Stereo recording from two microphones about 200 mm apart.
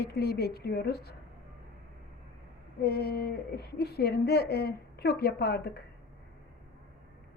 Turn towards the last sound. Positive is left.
turn(degrees=55)  # may be behind; listen again after turning